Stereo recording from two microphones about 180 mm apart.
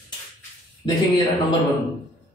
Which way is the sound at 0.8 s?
25° left (ahead or behind).